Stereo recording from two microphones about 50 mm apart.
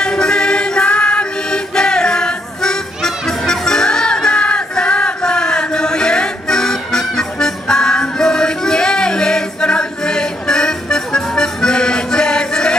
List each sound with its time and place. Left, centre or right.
0.0 s music: centre